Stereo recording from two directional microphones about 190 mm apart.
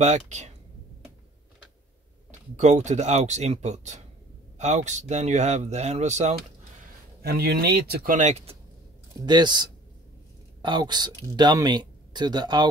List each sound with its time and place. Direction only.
0.0 s speech: 35° right (ahead or behind)
2.5 s speech: 40° right (ahead or behind)
7.2 s speech: 55° right (ahead or behind); by 8.5 s 35° right (ahead or behind)
9.2 s speech: 25° right (ahead or behind)